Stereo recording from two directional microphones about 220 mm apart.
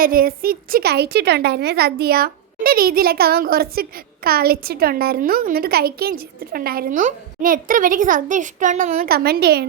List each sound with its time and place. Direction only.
0.0 s a woman's voice: 40° right (ahead or behind)